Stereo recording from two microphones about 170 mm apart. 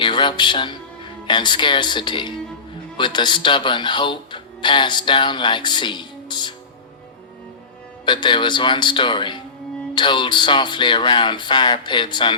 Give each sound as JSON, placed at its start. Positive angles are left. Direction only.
{"t": 0.0, "sound": "speech", "side_deg": 25}
{"t": 8.0, "sound": "speech", "side_deg": 25}